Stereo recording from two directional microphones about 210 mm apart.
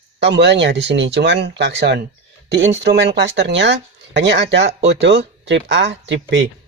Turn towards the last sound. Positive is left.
turn(degrees=-60)  # may be behind; listen again after turning